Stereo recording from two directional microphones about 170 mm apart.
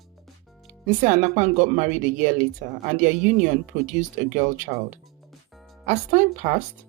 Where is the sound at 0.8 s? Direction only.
50° right (ahead or behind).